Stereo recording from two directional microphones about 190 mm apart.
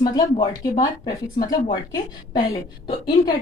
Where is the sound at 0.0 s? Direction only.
20° left (ahead or behind).